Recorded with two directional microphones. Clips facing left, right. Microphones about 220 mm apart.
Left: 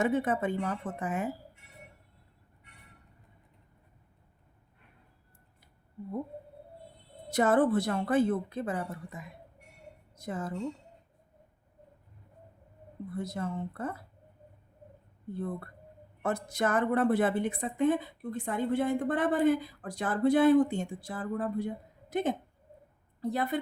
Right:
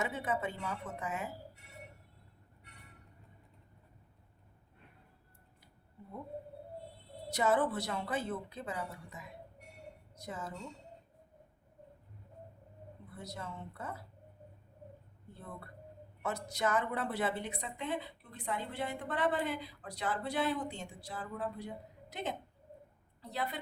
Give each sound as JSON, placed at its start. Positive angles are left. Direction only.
{"t": 0.0, "sound": "a woman's voice", "side_deg": 50}
{"t": 7.3, "sound": "a woman's voice", "side_deg": 50}
{"t": 13.1, "sound": "a woman's voice", "side_deg": 50}
{"t": 16.2, "sound": "a woman's voice", "side_deg": 50}